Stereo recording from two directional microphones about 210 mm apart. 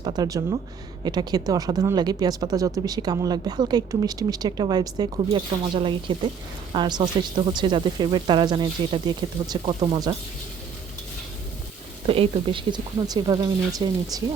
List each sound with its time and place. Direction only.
0.0 s speech: 20° right (ahead or behind)
12.0 s speech: 25° right (ahead or behind)